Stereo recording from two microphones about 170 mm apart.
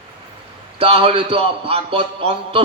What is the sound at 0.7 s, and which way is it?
A man's voice, 35° right (ahead or behind).